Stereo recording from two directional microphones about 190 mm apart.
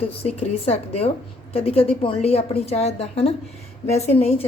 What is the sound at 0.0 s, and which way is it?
A woman's voice, 30° left (ahead or behind).